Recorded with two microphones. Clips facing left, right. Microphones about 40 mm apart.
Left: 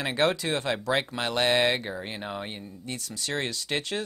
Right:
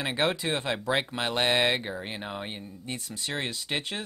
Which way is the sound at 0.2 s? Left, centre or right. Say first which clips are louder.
Left 3 dB; right.